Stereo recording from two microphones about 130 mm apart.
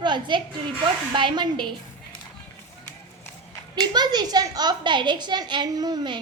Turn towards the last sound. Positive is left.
turn(degrees=-35)  # may be behind; listen again after turning